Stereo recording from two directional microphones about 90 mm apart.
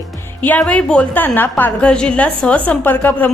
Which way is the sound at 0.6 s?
10° left (ahead or behind).